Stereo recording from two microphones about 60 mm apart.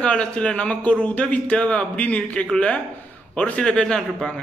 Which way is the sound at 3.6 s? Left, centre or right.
Centre.